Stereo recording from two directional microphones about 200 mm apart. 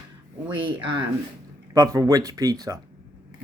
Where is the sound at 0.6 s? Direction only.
25° right (ahead or behind).